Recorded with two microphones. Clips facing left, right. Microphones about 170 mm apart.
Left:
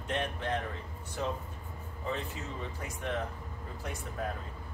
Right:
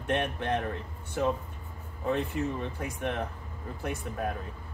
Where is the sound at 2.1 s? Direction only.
60° right (ahead or behind).